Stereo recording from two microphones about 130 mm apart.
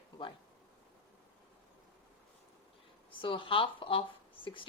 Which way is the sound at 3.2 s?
40° left (ahead or behind).